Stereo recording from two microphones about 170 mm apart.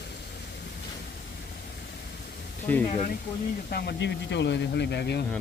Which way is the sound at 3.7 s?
70° left (ahead or behind).